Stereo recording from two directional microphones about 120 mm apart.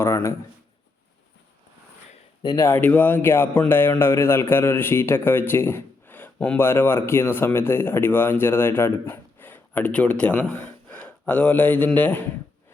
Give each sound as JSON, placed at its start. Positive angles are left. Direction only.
{"t": 0.0, "sound": "speech", "side_deg": 25}
{"t": 2.4, "sound": "speech", "side_deg": 35}
{"t": 2.6, "sound": "a man's voice", "side_deg": 15}